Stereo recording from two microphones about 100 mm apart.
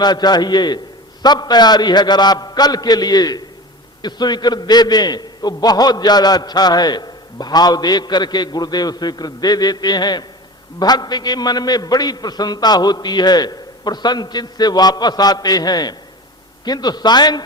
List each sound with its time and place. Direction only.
0.0 s a man's voice: 45° left (ahead or behind)